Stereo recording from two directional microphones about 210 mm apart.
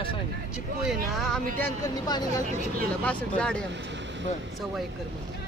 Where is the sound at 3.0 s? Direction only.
5° left (ahead or behind).